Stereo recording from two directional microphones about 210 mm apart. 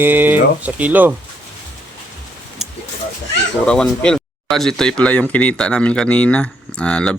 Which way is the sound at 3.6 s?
5° left (ahead or behind).